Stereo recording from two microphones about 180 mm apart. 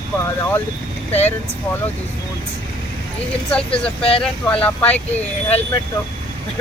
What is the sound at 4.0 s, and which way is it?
Speech, 30° left (ahead or behind).